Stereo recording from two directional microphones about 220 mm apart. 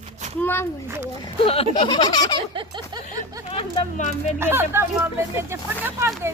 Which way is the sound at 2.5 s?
20° right (ahead or behind).